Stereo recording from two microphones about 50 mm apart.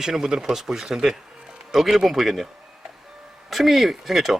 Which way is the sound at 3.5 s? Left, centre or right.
Centre.